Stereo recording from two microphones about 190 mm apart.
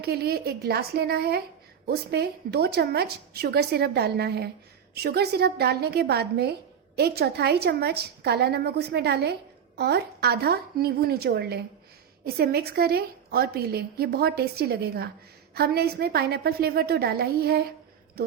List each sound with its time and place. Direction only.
0.0 s a woman's voice: 55° right (ahead or behind)